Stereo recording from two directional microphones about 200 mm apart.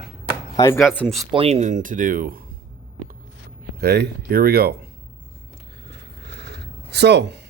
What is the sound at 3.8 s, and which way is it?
Speech, 55° right (ahead or behind).